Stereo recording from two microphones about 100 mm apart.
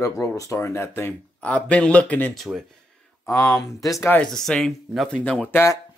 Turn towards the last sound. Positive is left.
turn(degrees=20)  # may be behind; listen again after turning